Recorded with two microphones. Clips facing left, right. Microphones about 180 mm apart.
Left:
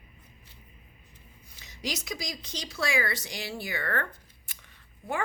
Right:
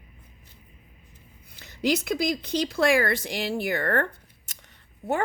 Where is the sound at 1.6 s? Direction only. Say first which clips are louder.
Right 11 dB; 60° right (ahead or behind).